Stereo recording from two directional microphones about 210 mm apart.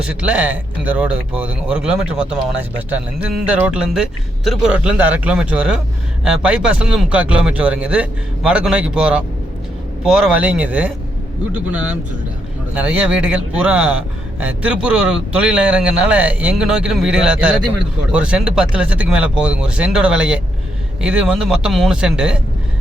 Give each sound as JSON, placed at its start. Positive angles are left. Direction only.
{"t": 0.0, "sound": "a man's voice", "side_deg": -5}
{"t": 12.7, "sound": "a man's voice", "side_deg": -5}